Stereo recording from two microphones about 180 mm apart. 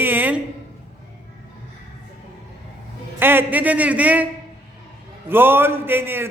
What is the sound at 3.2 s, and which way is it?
A man's voice, 10° right (ahead or behind).